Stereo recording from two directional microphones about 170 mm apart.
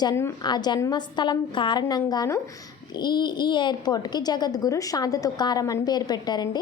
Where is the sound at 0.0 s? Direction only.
15° left (ahead or behind).